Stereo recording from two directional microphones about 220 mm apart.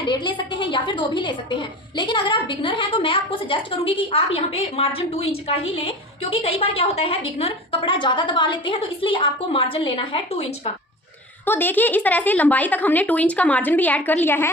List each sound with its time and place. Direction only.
0.0 s a woman's voice: 20° left (ahead or behind)
11.4 s speech: 10° left (ahead or behind)